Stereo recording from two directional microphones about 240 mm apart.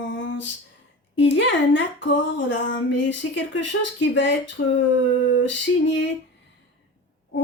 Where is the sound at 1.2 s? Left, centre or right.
Left.